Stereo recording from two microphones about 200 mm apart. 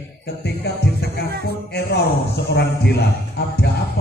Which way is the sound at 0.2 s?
55° left (ahead or behind).